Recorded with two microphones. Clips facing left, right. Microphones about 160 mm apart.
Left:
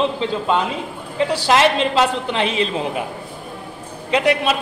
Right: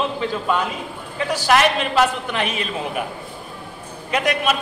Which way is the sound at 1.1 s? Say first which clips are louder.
Left 2 dB; 25° left (ahead or behind).